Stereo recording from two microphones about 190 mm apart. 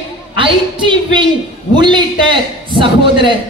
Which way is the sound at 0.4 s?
25° right (ahead or behind).